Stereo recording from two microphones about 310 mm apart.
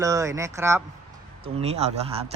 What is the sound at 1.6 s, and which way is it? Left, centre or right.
Speech, centre.